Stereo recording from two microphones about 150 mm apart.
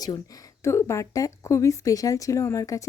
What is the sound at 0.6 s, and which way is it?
Speech, 20° left (ahead or behind).